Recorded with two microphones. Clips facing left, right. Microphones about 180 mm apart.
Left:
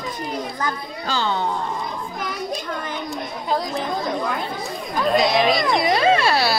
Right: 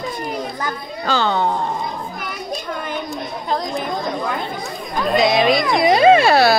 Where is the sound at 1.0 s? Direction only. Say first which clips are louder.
Right 5 dB; 65° right (ahead or behind).